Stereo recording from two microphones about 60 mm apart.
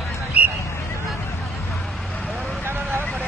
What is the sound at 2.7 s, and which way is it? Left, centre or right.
Vehicle, right.